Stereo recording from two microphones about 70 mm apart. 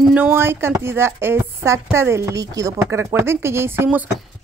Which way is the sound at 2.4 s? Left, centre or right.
Right.